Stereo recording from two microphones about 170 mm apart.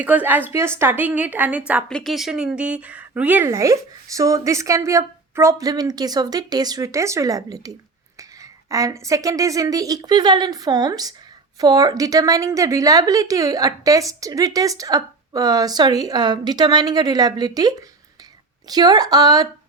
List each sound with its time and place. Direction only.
0.0 s a woman's voice: 10° right (ahead or behind)
1.9 s a woman's voice: 5° left (ahead or behind); by 19.5 s 20° right (ahead or behind)